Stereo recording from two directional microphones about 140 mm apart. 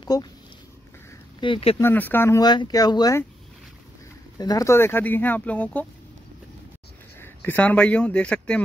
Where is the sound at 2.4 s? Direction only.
30° left (ahead or behind).